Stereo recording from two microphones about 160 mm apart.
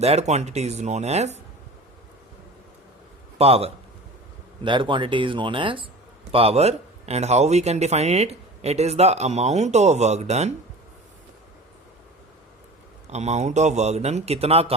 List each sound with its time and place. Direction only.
0.0 s speech: 40° right (ahead or behind)
3.3 s speech: 40° right (ahead or behind)
13.1 s speech: 45° right (ahead or behind)